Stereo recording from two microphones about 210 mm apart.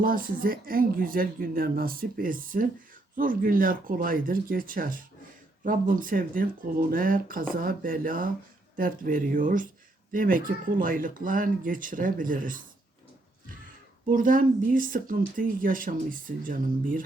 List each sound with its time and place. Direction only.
0.0 s speech: 40° right (ahead or behind)
14.1 s speech: 40° right (ahead or behind)